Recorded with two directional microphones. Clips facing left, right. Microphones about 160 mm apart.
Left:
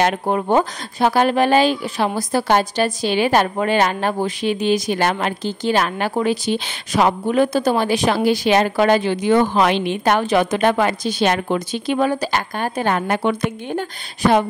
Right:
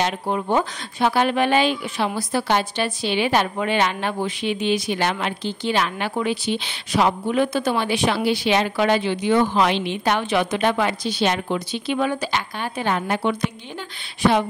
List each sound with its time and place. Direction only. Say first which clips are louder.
0.0 s speech: left 5 dB; 50° left (ahead or behind)